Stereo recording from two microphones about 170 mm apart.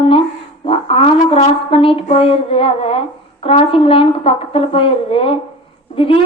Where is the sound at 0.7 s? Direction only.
35° left (ahead or behind).